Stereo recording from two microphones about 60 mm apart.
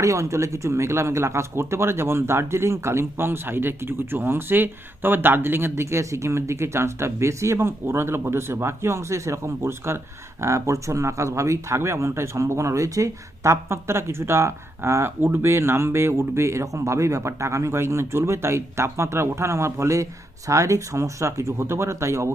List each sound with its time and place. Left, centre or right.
0.0 s speech: right
10.4 s speech: right